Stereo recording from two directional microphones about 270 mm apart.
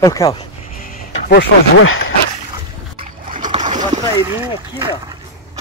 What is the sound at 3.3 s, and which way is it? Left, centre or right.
Boat, right.